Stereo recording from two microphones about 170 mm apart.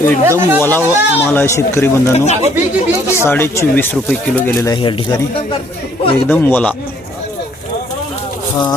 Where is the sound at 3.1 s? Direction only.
15° left (ahead or behind); by 5.4 s 30° left (ahead or behind).